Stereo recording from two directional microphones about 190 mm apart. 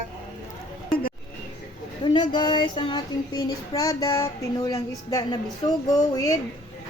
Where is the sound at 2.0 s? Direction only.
25° left (ahead or behind).